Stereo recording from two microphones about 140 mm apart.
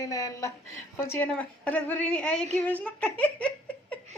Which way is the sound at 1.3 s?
10° left (ahead or behind).